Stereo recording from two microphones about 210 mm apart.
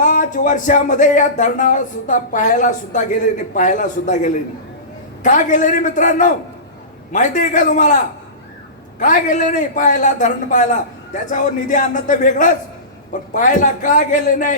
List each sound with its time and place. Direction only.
0.0 s speech: 40° left (ahead or behind)
9.0 s speech: 40° left (ahead or behind)